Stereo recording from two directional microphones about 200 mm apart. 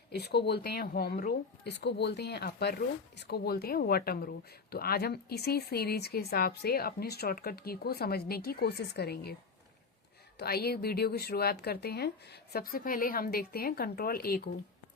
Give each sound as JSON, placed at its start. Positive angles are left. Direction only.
{"t": 0.1, "sound": "speech", "side_deg": 55}
{"t": 10.3, "sound": "speech", "side_deg": 50}